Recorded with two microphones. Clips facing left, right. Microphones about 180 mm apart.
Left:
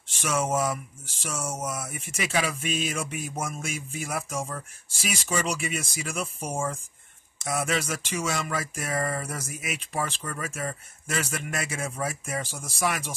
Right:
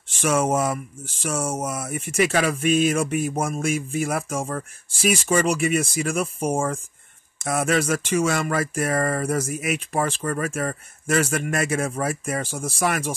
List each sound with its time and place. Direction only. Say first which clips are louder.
0.1 s speech: right 6 dB; 50° right (ahead or behind)